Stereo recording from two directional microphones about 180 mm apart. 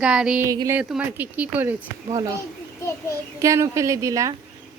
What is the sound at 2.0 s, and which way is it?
Speech, 20° right (ahead or behind).